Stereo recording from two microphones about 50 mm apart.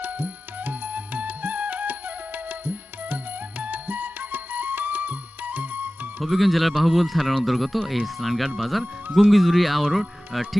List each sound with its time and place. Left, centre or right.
0.0 s music: right
6.2 s a man's voice: centre